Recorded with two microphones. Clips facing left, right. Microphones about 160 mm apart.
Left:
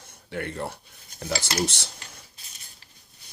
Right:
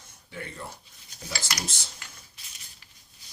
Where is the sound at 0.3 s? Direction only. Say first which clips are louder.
Left 8 dB; 65° left (ahead or behind).